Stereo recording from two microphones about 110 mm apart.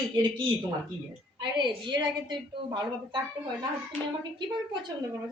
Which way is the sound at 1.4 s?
40° right (ahead or behind).